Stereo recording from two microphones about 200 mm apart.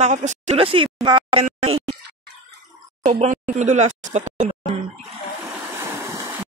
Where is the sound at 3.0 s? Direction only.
35° right (ahead or behind).